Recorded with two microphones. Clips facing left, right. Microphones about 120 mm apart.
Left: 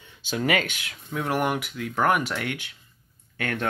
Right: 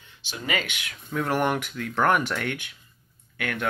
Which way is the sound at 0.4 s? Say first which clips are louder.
Left 5 dB; 70° left (ahead or behind).